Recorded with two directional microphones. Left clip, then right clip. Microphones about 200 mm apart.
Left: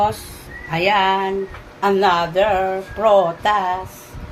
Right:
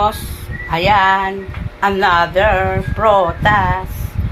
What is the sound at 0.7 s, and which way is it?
A woman's voice, 5° right (ahead or behind).